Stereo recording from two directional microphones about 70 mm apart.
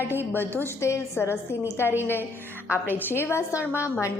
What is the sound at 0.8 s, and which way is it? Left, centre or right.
A woman's voice, left.